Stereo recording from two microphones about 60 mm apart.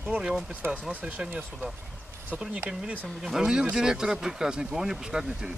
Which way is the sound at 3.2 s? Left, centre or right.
Centre.